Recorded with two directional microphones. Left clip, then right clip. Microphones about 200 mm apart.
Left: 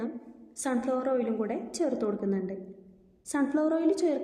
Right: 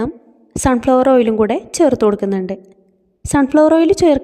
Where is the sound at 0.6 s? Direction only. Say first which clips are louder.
Right 17 dB; 45° right (ahead or behind).